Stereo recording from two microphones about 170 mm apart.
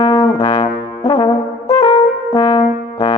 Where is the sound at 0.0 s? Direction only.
20° left (ahead or behind).